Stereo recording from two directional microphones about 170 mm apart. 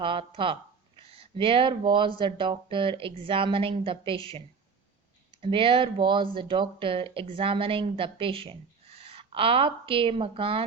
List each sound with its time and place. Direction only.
0.0 s speech: 30° right (ahead or behind)